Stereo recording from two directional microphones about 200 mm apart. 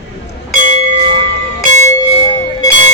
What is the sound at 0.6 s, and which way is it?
Bell, 35° right (ahead or behind).